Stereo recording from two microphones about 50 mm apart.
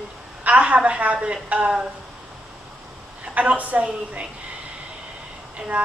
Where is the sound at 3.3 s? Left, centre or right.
Right.